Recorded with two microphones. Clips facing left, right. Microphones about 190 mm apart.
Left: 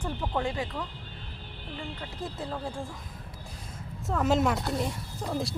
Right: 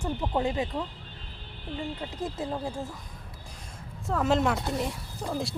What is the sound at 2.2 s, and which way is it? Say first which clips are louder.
Speech: right 3 dB; 20° right (ahead or behind).